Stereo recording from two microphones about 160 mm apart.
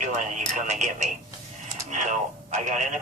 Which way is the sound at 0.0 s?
50° right (ahead or behind).